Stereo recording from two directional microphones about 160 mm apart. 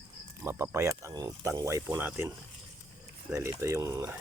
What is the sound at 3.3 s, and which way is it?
Speech, 20° right (ahead or behind).